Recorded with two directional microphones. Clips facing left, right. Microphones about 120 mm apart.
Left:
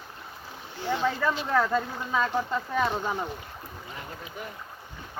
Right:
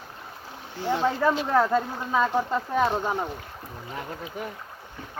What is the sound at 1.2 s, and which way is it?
Speech, 15° right (ahead or behind).